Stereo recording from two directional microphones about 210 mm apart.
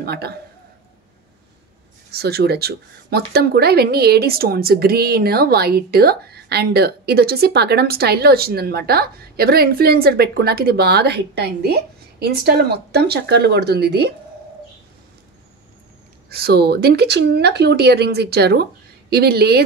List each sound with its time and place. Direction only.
0.0 s speech: 50° right (ahead or behind)
2.0 s speech: 50° right (ahead or behind)
16.3 s speech: 45° right (ahead or behind)